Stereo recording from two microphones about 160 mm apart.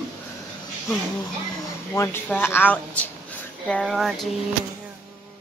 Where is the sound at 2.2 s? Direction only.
10° left (ahead or behind).